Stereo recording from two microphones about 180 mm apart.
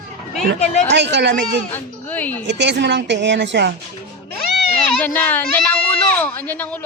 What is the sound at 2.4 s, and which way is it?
A woman's voice, 75° right (ahead or behind).